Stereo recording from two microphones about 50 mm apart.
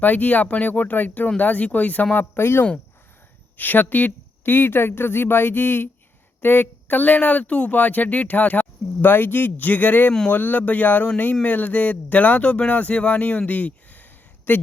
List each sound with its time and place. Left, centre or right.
0.0 s speech: left
2.1 s speech: left
3.6 s speech: left
13.5 s a sound: left